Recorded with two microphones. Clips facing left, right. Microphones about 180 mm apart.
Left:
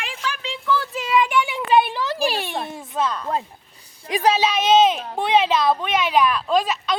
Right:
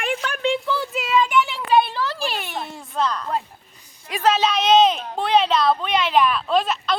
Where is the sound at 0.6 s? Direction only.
25° right (ahead or behind).